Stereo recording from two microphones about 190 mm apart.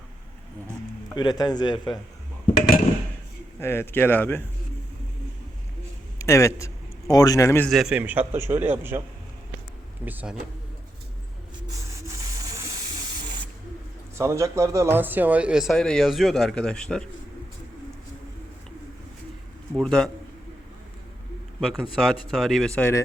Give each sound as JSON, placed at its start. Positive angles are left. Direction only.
{"t": 1.1, "sound": "speech", "side_deg": 20}
{"t": 3.6, "sound": "speech", "side_deg": 15}
{"t": 6.1, "sound": "a man's voice", "side_deg": 15}
{"t": 7.7, "sound": "a man's voice", "side_deg": 0}
{"t": 10.1, "sound": "a man's voice", "side_deg": -10}
{"t": 11.8, "sound": "rub", "side_deg": -15}
{"t": 14.2, "sound": "speech", "side_deg": -15}
{"t": 19.7, "sound": "speech", "side_deg": 5}
{"t": 21.6, "sound": "speech", "side_deg": 0}